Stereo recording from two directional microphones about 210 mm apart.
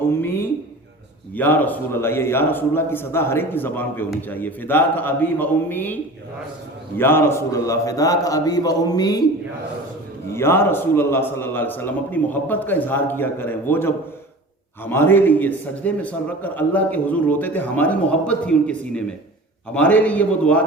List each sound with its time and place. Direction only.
0.0 s a sound: 10° left (ahead or behind)
1.4 s a man's voice: 10° left (ahead or behind)
10.3 s a man's voice: 10° left (ahead or behind)